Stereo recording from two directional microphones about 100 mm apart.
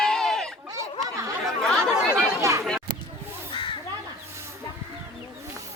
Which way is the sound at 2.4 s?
30° right (ahead or behind).